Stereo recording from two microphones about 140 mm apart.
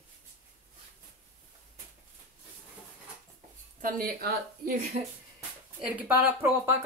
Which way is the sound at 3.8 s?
90° right.